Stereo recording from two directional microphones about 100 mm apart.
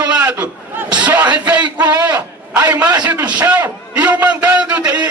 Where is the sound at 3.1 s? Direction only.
15° right (ahead or behind).